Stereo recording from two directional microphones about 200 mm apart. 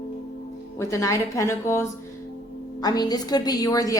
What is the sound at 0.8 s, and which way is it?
A woman's voice, 15° left (ahead or behind).